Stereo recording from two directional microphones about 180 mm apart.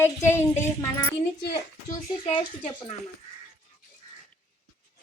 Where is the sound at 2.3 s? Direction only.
30° left (ahead or behind).